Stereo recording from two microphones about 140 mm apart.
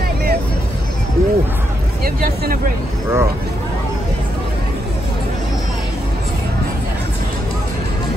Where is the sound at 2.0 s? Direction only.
90° right.